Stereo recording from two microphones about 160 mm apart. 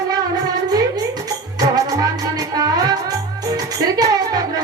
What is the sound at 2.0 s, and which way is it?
Music, 25° right (ahead or behind).